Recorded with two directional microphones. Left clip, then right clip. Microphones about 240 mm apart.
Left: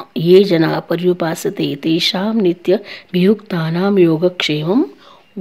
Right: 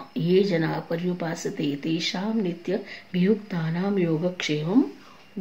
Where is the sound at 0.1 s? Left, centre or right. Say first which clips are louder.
Left 12 dB; left.